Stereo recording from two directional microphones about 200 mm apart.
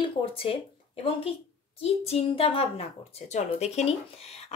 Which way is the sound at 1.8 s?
30° left (ahead or behind).